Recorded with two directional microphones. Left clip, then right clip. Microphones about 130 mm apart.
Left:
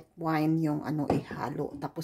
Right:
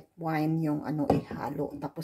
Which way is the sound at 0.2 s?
25° left (ahead or behind).